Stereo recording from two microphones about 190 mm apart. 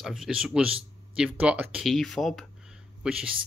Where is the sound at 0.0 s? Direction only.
Centre (ahead or behind).